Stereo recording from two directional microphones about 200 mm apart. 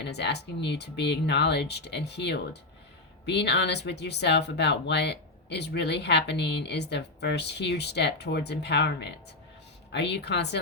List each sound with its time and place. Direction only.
0.0 s speech: 60° left (ahead or behind)